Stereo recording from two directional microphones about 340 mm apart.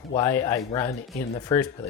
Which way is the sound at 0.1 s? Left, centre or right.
Centre.